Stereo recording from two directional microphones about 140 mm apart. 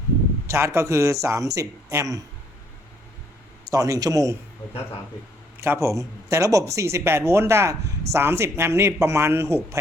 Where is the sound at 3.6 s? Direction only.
25° right (ahead or behind).